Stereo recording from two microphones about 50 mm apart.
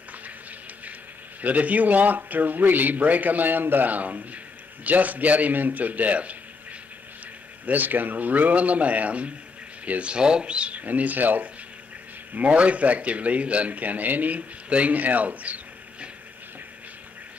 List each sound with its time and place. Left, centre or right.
1.4 s speech: right
7.6 s a man's voice: right